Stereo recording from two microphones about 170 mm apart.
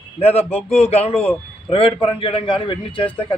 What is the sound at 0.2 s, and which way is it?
A man's voice, 35° left (ahead or behind).